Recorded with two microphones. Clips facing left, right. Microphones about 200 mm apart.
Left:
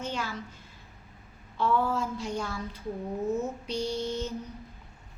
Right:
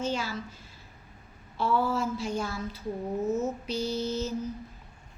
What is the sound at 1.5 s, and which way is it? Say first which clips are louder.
A woman's voice: even; 5° right (ahead or behind).